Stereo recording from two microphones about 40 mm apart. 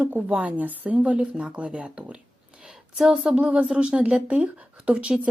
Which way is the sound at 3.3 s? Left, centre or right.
Right.